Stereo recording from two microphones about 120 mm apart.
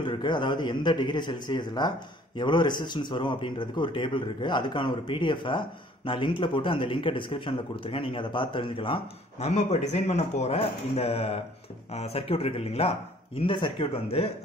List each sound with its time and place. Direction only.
0.0 s a man's voice: 40° left (ahead or behind)
9.5 s speech: 70° left (ahead or behind); by 14.3 s 55° left (ahead or behind)